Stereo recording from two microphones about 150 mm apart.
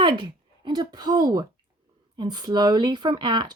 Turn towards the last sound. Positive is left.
turn(degrees=-30)  # may be behind; listen again after turning